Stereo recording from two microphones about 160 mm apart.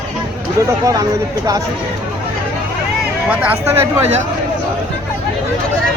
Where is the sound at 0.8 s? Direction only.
20° right (ahead or behind).